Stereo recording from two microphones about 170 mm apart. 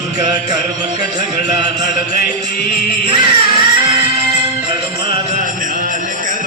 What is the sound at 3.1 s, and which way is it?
Music, 25° right (ahead or behind).